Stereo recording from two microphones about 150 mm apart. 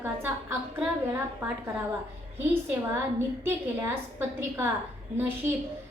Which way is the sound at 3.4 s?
15° right (ahead or behind).